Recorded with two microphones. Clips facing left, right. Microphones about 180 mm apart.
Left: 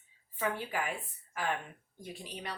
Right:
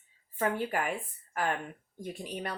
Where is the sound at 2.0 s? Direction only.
50° right (ahead or behind).